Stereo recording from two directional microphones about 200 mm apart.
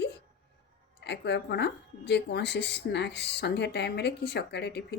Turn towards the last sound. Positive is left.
turn(degrees=60)  # may be behind; listen again after turning